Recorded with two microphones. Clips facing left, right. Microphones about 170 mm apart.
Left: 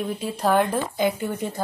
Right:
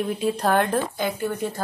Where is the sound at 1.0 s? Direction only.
15° left (ahead or behind).